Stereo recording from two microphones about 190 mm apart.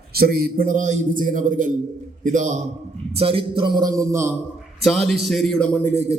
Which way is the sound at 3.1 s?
30° right (ahead or behind).